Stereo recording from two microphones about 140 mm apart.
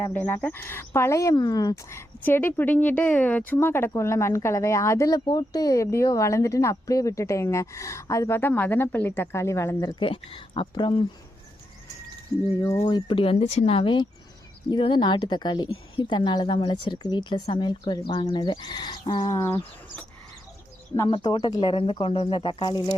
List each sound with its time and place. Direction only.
0.0 s speech: 10° left (ahead or behind); by 11.0 s 35° left (ahead or behind)
12.5 s speech: 20° left (ahead or behind)
12.8 s a woman's voice: 35° left (ahead or behind)
13.4 s a woman's voice: 50° left (ahead or behind); by 19.6 s 20° left (ahead or behind)
21.1 s a woman's voice: 35° left (ahead or behind)